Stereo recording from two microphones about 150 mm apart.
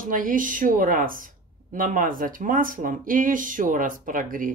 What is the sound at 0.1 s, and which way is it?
Speech, 65° right (ahead or behind).